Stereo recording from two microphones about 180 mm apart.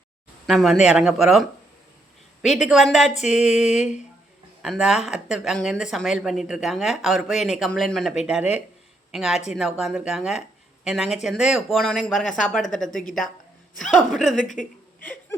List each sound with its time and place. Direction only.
0.4 s speech: centre (ahead or behind)
4.6 s speech: centre (ahead or behind)
15.0 s a sound: 10° left (ahead or behind)